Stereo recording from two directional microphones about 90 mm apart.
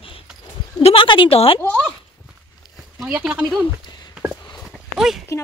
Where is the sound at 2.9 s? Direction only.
10° right (ahead or behind).